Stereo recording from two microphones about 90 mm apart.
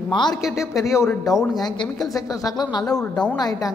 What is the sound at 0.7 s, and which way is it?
Speech, 35° left (ahead or behind).